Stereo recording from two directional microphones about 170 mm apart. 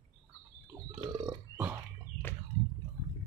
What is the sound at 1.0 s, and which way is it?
Burping, 25° right (ahead or behind).